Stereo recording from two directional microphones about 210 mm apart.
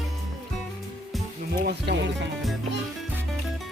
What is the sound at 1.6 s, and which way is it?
Speech, 50° right (ahead or behind).